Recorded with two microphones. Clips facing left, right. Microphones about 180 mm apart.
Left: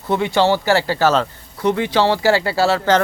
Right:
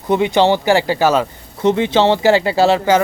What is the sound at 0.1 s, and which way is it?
Speech, 20° right (ahead or behind).